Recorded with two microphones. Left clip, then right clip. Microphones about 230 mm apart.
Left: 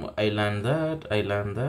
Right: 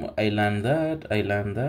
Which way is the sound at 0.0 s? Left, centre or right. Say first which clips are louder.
Right 2 dB; centre.